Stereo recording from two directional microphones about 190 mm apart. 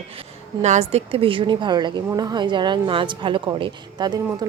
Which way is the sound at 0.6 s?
35° right (ahead or behind).